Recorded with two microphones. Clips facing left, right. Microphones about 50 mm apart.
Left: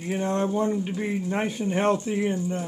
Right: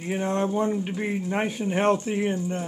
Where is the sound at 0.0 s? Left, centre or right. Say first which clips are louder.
Even; right.